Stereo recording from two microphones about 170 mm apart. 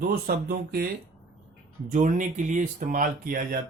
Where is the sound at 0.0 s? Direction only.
70° right (ahead or behind).